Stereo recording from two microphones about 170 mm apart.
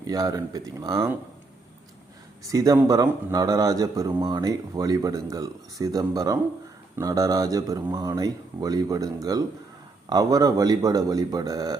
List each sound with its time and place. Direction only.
0.0 s a man's voice: 20° right (ahead or behind)
2.4 s a man's voice: 20° right (ahead or behind)